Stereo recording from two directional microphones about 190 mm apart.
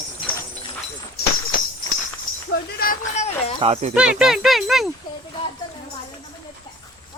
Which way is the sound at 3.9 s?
5° right (ahead or behind).